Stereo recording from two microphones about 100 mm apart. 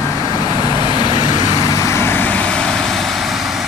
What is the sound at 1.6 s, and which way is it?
Vehicle, 30° left (ahead or behind).